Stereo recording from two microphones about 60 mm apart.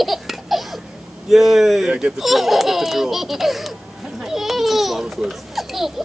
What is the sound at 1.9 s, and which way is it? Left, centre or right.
Speech, centre.